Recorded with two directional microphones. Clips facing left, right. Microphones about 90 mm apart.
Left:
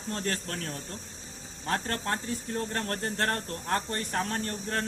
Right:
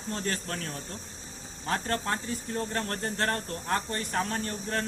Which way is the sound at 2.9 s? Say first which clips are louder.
Left 2 dB; 50° left (ahead or behind).